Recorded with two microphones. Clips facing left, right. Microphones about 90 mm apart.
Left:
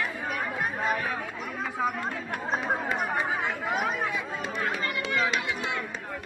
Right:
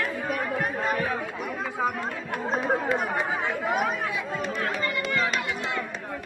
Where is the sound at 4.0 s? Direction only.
15° left (ahead or behind).